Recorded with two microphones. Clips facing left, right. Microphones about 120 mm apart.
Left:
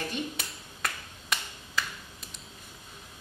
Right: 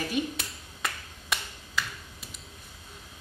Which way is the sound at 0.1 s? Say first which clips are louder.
Right 4 dB; centre (ahead or behind).